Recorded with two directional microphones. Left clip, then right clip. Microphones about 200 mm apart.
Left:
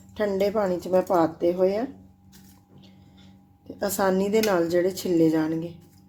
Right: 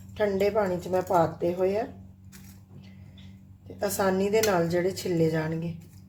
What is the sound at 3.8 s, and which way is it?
A woman's voice, 35° left (ahead or behind).